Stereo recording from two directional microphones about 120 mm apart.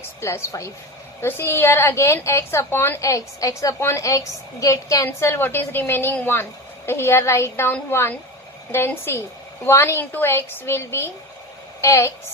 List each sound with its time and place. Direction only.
0.2 s a woman's voice: 25° left (ahead or behind)